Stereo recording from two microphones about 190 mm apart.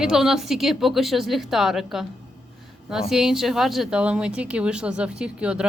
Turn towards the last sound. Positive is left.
turn(degrees=-5)  # may be behind; listen again after turning